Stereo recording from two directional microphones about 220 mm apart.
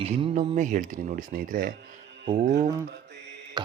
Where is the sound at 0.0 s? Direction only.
25° right (ahead or behind).